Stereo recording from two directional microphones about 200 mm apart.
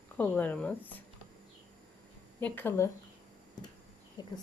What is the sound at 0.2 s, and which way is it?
Speech, 10° left (ahead or behind).